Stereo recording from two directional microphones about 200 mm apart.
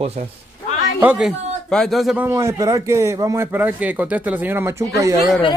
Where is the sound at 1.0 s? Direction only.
10° right (ahead or behind).